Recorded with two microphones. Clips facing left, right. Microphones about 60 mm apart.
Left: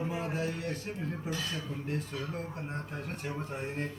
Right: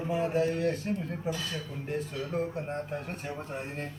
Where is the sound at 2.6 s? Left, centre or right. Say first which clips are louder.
Right 4 dB; centre.